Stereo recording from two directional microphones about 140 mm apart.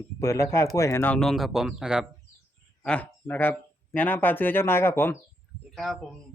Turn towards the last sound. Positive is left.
turn(degrees=0)  # may be behind; listen again after turning